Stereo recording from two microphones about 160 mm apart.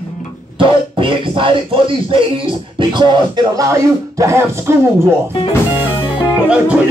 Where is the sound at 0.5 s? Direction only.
30° right (ahead or behind); by 4.7 s 15° right (ahead or behind).